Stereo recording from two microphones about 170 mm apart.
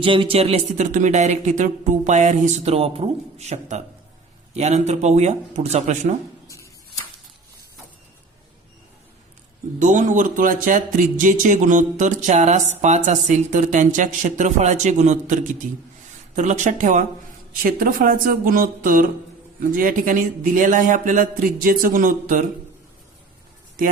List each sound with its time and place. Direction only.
0.0 s speech: 30° right (ahead or behind)
9.7 s speech: 50° right (ahead or behind)